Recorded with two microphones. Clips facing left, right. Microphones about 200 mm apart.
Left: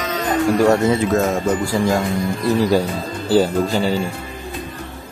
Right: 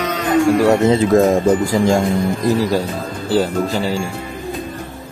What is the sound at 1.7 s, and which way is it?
Speech, 20° right (ahead or behind).